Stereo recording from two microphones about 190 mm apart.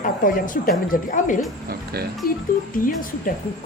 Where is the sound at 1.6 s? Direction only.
55° right (ahead or behind).